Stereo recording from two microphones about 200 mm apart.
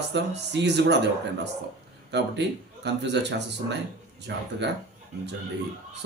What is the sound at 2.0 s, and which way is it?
Speech, 60° right (ahead or behind).